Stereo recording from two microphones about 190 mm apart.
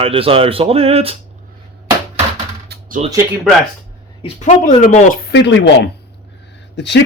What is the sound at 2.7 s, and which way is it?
Music, 50° right (ahead or behind).